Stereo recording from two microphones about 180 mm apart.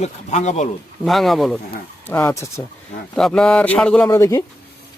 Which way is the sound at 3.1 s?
5° left (ahead or behind).